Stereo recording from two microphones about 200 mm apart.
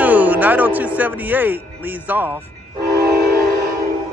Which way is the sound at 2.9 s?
50° right (ahead or behind).